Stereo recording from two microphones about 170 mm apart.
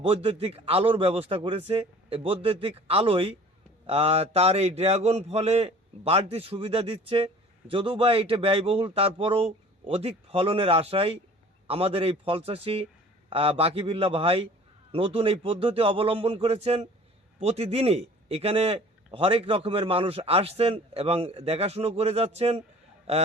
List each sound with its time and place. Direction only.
0.0 s a man's voice: 35° right (ahead or behind)